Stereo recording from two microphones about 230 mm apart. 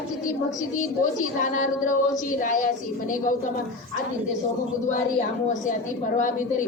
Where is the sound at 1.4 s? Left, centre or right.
Left.